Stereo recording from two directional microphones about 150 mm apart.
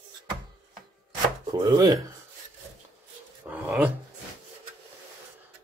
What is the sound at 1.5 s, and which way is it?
Speech, 25° right (ahead or behind).